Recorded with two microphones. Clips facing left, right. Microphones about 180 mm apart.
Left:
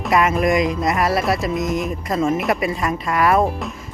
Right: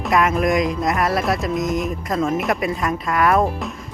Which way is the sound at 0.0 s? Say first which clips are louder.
Left 1 dB; centre (ahead or behind).